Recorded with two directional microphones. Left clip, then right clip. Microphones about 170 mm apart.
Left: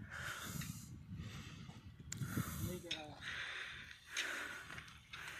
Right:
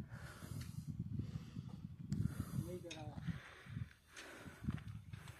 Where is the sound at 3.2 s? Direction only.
15° right (ahead or behind).